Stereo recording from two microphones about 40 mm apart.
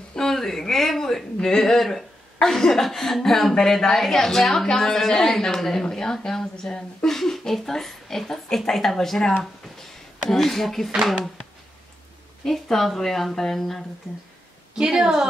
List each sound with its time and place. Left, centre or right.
0.1 s a woman's voice: centre
10.3 s a woman's voice: centre
12.4 s a woman's voice: centre
14.8 s a woman's voice: centre